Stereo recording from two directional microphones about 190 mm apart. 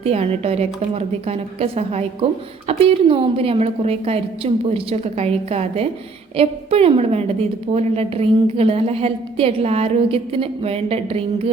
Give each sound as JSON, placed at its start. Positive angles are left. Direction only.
{"t": 0.0, "sound": "a woman's voice", "side_deg": -30}